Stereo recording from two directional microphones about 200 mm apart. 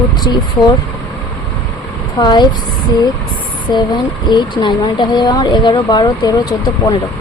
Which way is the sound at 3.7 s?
20° left (ahead or behind).